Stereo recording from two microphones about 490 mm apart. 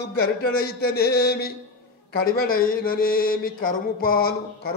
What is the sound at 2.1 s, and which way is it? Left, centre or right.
Mantra, centre.